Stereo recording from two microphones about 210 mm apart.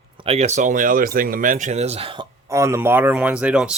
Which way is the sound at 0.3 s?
30° right (ahead or behind).